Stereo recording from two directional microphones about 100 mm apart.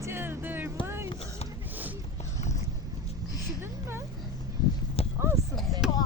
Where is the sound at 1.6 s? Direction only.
20° right (ahead or behind).